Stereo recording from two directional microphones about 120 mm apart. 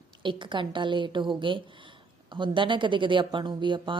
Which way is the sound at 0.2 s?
40° right (ahead or behind).